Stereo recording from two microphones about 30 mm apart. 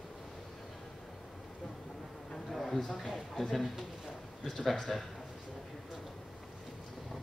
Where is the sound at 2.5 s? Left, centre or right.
Centre.